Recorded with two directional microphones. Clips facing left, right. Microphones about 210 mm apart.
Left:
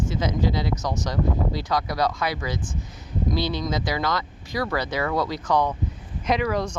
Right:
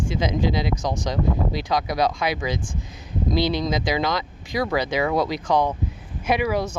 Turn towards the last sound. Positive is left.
turn(degrees=-5)  # may be behind; listen again after turning